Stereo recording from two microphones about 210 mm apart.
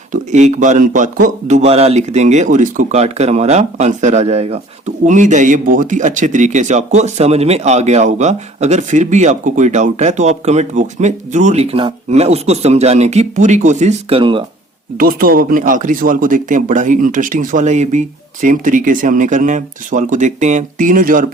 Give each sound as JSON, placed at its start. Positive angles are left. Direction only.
{"t": 0.1, "sound": "speech", "side_deg": -35}
{"t": 14.9, "sound": "speech", "side_deg": -45}